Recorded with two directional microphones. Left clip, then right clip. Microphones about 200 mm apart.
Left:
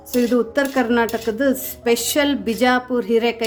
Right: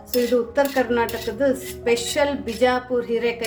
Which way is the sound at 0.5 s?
40° left (ahead or behind).